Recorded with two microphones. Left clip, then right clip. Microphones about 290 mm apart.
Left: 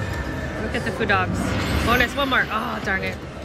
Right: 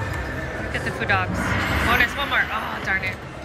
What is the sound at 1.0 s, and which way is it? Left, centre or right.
Speech, centre.